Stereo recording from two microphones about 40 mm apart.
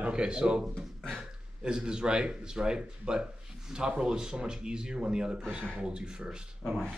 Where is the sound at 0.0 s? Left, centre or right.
Right.